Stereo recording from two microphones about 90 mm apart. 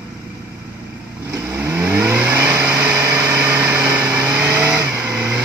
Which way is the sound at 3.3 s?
20° right (ahead or behind).